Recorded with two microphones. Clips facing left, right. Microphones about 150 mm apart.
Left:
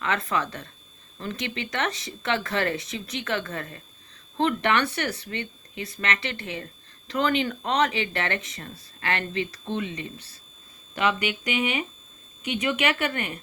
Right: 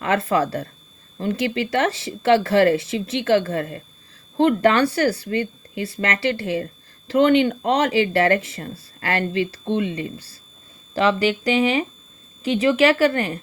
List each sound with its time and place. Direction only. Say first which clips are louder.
0.0 s speech: right 7 dB; 30° right (ahead or behind)